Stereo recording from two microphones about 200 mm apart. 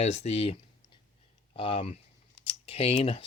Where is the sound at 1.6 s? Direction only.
30° left (ahead or behind).